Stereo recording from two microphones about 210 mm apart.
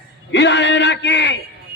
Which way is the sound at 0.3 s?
55° left (ahead or behind).